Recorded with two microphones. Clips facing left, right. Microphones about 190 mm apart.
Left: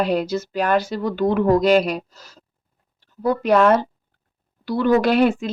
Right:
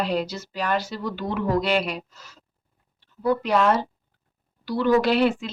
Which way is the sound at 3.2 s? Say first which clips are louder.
Left 4 dB; 50° left (ahead or behind).